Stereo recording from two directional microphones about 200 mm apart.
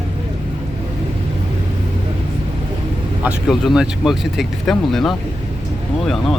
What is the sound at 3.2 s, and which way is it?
Speech, centre (ahead or behind).